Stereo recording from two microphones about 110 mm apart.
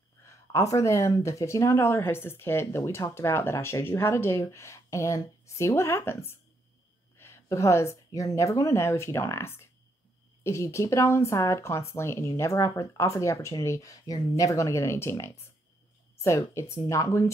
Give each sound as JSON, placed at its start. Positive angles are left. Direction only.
{"t": 0.2, "sound": "speech", "side_deg": 30}